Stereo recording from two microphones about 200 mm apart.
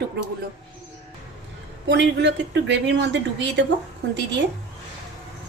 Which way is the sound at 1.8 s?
65° right (ahead or behind).